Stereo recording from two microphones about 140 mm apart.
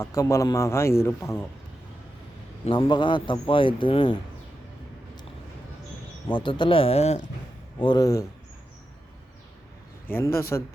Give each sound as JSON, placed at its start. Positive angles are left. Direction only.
{"t": 0.0, "sound": "a man's voice", "side_deg": 20}
{"t": 2.6, "sound": "a man's voice", "side_deg": 35}
{"t": 6.2, "sound": "a man's voice", "side_deg": 35}
{"t": 7.8, "sound": "a man's voice", "side_deg": 30}
{"t": 10.1, "sound": "speech", "side_deg": 15}